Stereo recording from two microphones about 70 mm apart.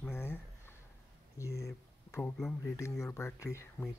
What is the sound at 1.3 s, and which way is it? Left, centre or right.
Speech, left.